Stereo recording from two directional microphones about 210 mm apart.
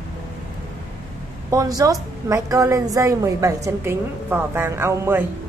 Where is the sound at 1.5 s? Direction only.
15° right (ahead or behind).